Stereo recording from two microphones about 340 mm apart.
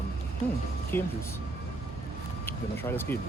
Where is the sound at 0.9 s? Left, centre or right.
Centre.